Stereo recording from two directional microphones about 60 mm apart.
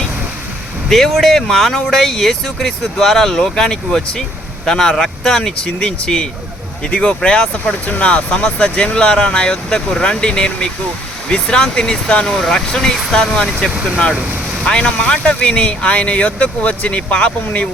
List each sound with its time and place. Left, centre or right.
0.9 s speech: centre
14.6 s speech: centre